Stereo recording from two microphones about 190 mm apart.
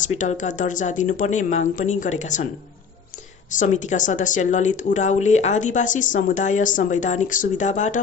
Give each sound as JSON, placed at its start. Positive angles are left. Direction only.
{"t": 0.0, "sound": "speech", "side_deg": 40}
{"t": 3.5, "sound": "speech", "side_deg": 40}